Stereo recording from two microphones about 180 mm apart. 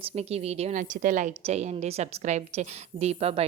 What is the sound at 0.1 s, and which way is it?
Speech, 35° right (ahead or behind).